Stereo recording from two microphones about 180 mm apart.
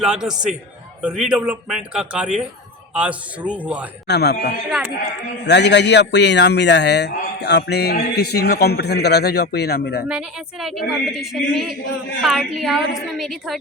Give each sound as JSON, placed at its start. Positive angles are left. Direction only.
{"t": 0.0, "sound": "a woman's voice", "side_deg": -5}
{"t": 4.0, "sound": "a man's voice", "side_deg": 70}
{"t": 10.1, "sound": "a woman's voice", "side_deg": -5}